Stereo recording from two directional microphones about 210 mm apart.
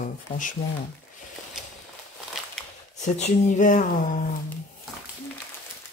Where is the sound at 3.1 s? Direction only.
35° left (ahead or behind).